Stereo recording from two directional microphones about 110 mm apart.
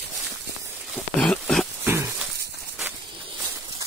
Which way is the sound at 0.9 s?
5° left (ahead or behind).